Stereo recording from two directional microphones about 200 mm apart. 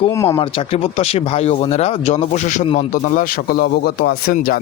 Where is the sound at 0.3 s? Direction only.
25° left (ahead or behind).